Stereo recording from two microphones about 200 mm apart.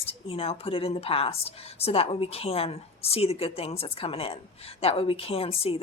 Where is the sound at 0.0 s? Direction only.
30° left (ahead or behind).